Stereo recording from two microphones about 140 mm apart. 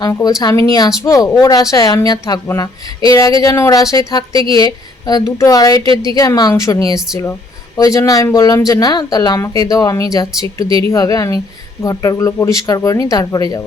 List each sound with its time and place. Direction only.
0.0 s speech: 25° left (ahead or behind)
5.8 s a woman's voice: 35° right (ahead or behind)
6.1 s speech: 25° left (ahead or behind)